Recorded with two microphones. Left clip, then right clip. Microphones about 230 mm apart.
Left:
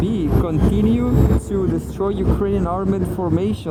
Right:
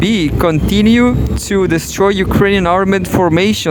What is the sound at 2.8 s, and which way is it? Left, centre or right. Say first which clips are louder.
Speech: right 10 dB; right.